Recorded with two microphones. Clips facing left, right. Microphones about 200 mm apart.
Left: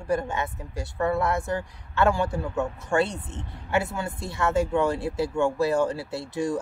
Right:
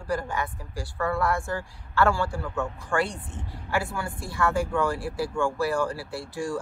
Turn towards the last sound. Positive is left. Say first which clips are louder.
# left 3 dB
turn(degrees=20)  # may be behind; listen again after turning